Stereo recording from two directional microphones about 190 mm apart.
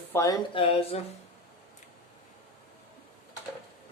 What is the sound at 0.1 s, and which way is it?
Speech, 15° left (ahead or behind).